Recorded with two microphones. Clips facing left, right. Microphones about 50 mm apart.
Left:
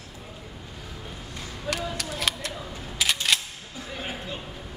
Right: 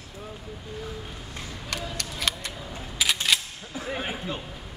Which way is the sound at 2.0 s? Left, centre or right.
Centre.